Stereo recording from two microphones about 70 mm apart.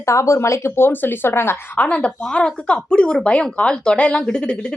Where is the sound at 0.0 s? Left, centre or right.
Left.